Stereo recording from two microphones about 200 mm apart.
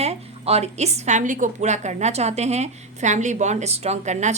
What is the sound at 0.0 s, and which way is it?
A woman's voice, 30° right (ahead or behind).